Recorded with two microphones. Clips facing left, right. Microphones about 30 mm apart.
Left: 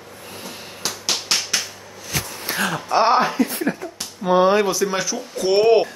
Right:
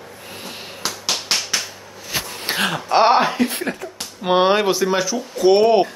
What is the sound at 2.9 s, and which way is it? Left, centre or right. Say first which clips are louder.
Speech: right 2 dB; right.